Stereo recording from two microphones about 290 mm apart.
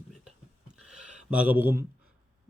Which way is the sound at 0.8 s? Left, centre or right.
Centre.